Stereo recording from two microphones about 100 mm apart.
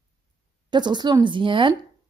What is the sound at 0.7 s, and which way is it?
A woman's voice, 50° right (ahead or behind).